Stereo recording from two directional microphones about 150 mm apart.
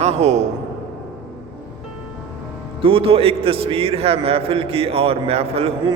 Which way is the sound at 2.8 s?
35° right (ahead or behind).